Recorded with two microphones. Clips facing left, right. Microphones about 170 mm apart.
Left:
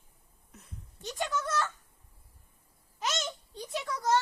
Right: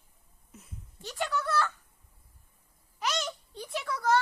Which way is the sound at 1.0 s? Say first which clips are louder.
Right 1 dB; 20° left (ahead or behind).